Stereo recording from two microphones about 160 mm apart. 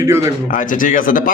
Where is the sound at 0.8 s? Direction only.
55° left (ahead or behind).